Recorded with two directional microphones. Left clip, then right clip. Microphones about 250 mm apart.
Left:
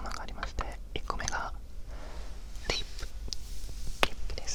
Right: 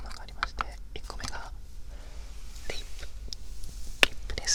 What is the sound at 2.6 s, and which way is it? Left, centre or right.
Whispering, left.